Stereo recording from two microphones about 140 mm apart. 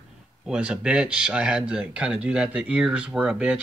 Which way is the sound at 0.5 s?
5° right (ahead or behind).